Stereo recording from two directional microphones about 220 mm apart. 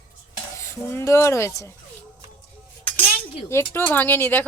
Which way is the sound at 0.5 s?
10° left (ahead or behind).